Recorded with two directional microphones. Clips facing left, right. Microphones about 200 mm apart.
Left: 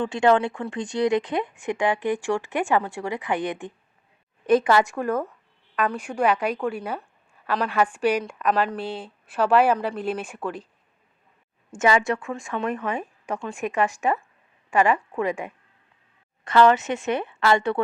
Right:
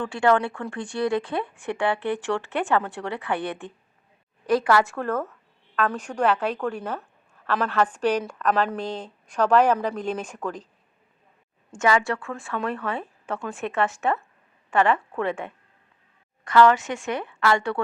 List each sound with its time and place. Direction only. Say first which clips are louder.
0.0 s a woman's voice: left 2 dB; 20° left (ahead or behind)
11.8 s speech: left 1 dB; 20° left (ahead or behind)
16.4 s a woman's voice: even; 25° left (ahead or behind)